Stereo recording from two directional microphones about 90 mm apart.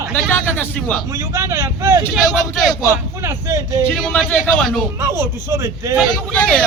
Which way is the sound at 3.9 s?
Centre (ahead or behind).